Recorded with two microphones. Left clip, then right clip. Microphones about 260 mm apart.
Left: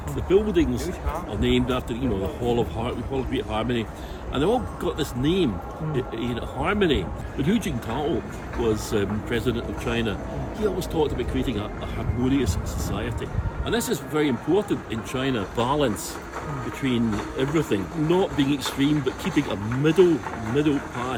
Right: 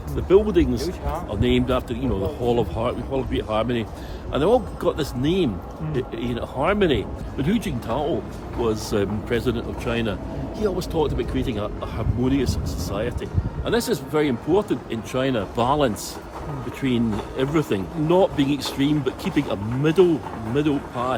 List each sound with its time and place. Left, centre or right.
0.3 s speech: centre